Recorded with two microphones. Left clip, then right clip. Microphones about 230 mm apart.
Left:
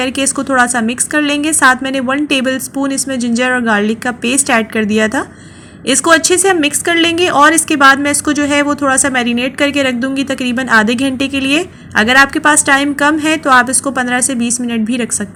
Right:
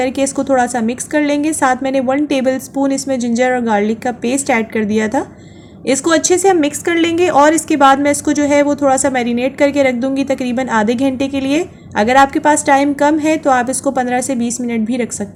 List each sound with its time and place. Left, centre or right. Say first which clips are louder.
0.0 s a woman's voice: even; centre